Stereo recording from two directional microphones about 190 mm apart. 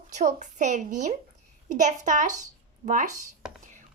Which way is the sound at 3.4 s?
5° right (ahead or behind).